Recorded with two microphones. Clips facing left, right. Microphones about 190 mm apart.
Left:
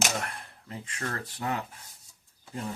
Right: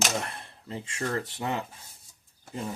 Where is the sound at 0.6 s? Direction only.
25° right (ahead or behind).